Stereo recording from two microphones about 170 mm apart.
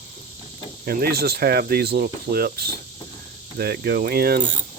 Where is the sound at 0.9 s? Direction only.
60° right (ahead or behind).